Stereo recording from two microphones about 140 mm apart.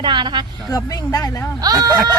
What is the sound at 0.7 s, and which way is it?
Speech, 25° left (ahead or behind).